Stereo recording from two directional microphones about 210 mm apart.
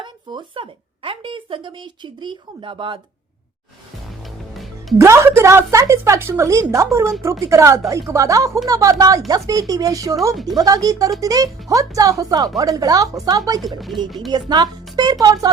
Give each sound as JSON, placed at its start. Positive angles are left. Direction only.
{"t": 0.0, "sound": "speech", "side_deg": -20}
{"t": 4.2, "sound": "music", "side_deg": 0}
{"t": 4.9, "sound": "a woman's voice", "side_deg": -15}
{"t": 13.6, "sound": "speech", "side_deg": 0}
{"t": 14.3, "sound": "a woman's voice", "side_deg": -20}